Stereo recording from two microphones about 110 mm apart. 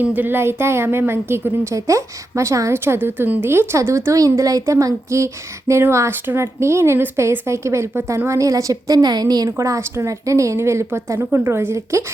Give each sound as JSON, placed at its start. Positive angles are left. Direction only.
{"t": 0.0, "sound": "a woman's voice", "side_deg": -15}